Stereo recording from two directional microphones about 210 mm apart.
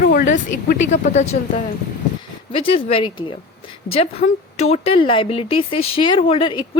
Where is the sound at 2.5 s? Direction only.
25° left (ahead or behind).